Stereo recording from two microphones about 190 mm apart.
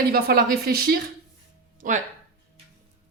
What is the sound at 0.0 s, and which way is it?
Speech, 50° right (ahead or behind).